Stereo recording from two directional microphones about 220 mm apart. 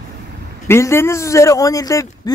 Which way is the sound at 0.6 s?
10° left (ahead or behind).